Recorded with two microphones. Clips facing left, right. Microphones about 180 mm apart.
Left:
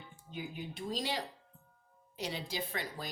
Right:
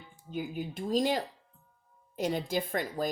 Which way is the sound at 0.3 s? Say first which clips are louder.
Right 7 dB; 45° right (ahead or behind).